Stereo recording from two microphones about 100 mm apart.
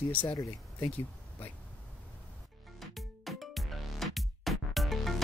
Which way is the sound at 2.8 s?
Centre (ahead or behind).